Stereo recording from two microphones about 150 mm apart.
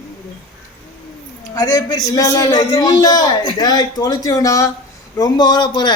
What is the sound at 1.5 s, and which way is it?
A man's voice, 25° left (ahead or behind).